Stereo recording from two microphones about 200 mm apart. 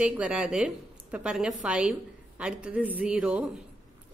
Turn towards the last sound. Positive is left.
turn(degrees=-5)  # may be behind; listen again after turning